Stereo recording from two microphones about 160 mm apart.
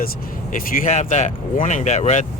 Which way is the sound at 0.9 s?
45° left (ahead or behind).